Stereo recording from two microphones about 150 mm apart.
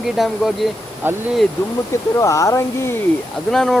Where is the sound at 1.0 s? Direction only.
15° right (ahead or behind).